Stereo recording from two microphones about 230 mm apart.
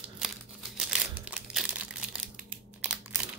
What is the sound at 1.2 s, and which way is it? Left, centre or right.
Crumpling, centre.